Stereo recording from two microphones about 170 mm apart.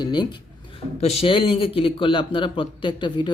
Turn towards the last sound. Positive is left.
turn(degrees=25)  # may be behind; listen again after turning